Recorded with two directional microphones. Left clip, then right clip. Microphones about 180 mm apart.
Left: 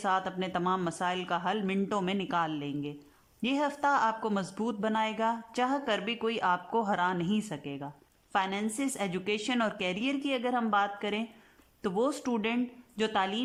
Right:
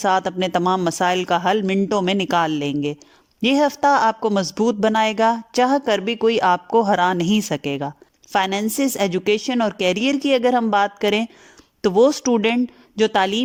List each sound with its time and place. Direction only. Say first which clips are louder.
0.0 s a woman's voice: right 11 dB; 40° right (ahead or behind)